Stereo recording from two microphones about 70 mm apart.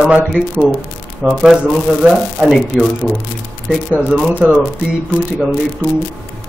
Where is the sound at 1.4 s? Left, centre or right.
Centre.